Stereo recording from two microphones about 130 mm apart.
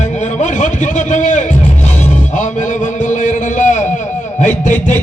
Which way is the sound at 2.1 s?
70° left (ahead or behind).